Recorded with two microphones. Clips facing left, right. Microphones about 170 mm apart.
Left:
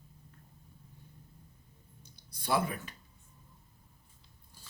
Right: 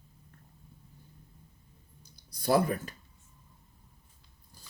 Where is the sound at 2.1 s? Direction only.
40° right (ahead or behind).